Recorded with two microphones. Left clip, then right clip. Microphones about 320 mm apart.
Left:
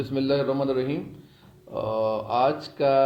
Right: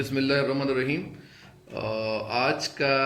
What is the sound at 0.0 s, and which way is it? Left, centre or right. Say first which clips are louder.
Speech: left 1 dB; centre.